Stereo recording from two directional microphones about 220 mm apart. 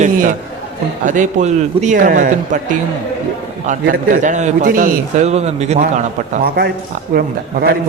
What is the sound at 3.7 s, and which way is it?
A man's voice, 40° right (ahead or behind).